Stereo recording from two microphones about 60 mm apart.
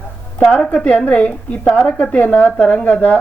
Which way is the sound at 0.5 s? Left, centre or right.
Centre.